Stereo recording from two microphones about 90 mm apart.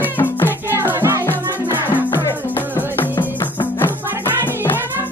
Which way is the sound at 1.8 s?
25° left (ahead or behind).